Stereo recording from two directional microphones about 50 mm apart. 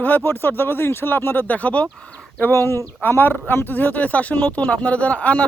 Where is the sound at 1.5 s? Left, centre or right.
Left.